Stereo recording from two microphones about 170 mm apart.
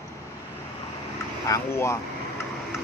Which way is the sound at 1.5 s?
15° left (ahead or behind).